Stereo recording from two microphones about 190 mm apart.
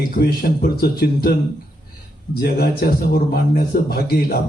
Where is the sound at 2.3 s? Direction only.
50° left (ahead or behind).